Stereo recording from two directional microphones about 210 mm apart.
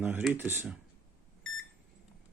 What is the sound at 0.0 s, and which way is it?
Speech, 10° right (ahead or behind).